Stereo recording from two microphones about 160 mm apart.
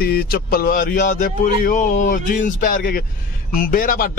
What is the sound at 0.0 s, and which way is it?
Speech, 75° left (ahead or behind).